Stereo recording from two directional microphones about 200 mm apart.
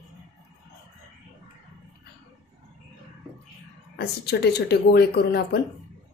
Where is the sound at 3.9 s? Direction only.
55° left (ahead or behind).